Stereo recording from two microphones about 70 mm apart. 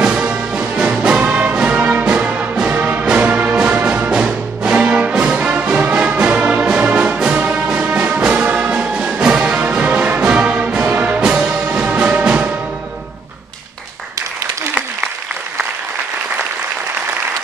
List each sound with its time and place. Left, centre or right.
0.2 s music: centre